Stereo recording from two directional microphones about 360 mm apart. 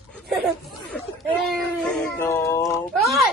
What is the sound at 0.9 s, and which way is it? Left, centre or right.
Speech, centre.